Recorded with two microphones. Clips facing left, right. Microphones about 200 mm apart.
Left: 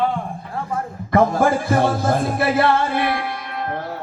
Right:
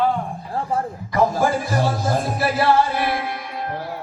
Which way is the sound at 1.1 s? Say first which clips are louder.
Left 3 dB; 55° left (ahead or behind).